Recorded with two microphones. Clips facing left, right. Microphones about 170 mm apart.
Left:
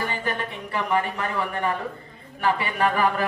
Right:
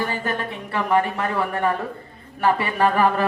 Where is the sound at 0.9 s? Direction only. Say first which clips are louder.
Right 5 dB; 40° right (ahead or behind).